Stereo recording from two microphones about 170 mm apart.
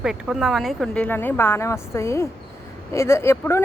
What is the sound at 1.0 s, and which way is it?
Speech, 10° left (ahead or behind).